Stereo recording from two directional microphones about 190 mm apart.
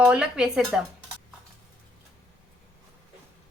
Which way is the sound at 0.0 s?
5° right (ahead or behind).